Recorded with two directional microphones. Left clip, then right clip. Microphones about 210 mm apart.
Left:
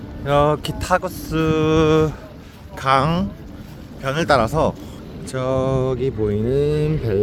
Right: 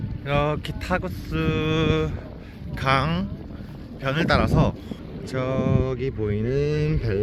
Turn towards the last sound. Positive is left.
turn(degrees=0)  # may be behind; listen again after turning